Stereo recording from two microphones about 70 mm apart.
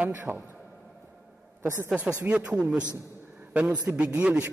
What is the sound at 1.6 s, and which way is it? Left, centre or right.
Speech, right.